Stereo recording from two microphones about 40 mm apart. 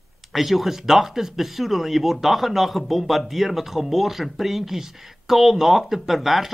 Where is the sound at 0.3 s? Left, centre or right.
Centre.